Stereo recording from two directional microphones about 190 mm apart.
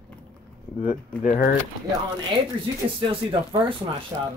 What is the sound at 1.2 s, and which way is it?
Speech, 45° left (ahead or behind).